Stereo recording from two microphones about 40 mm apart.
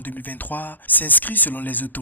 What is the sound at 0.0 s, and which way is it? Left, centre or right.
Speech, left.